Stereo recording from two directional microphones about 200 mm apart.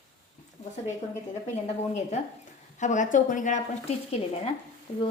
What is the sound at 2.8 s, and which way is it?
Speech, 40° left (ahead or behind).